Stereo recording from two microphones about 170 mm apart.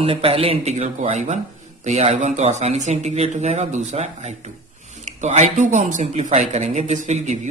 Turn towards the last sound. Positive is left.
turn(degrees=-45)  # may be behind; listen again after turning